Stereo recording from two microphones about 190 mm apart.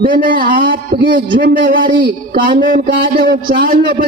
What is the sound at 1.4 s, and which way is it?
Speech, 60° right (ahead or behind).